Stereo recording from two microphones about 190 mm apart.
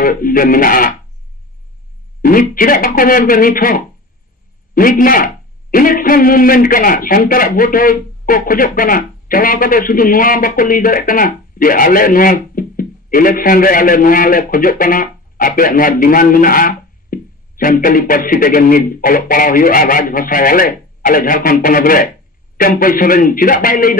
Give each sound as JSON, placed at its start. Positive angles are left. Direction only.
{"t": 0.0, "sound": "a man's voice", "side_deg": 50}
{"t": 2.2, "sound": "a man's voice", "side_deg": 45}